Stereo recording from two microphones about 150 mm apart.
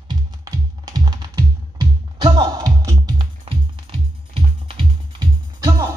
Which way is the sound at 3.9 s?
35° right (ahead or behind).